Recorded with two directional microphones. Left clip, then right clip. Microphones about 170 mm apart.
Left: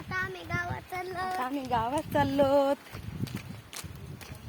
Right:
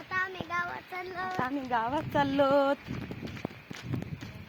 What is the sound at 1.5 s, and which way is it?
Speech, 10° right (ahead or behind).